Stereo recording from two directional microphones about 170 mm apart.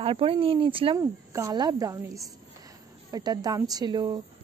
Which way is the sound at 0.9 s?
20° right (ahead or behind).